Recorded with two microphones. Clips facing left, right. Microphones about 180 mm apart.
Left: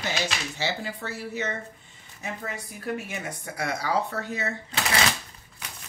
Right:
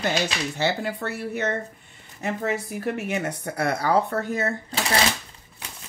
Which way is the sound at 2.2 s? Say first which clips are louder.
Right 9 dB; 75° right (ahead or behind).